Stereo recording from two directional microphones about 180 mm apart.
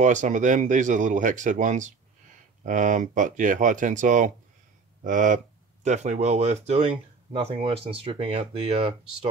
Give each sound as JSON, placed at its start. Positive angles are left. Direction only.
{"t": 0.0, "sound": "speech", "side_deg": -45}